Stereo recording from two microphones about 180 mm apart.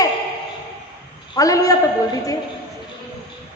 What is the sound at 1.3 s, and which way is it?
Speech, 20° left (ahead or behind).